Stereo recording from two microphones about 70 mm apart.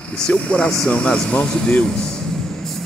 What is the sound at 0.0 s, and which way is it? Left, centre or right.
Speech, centre.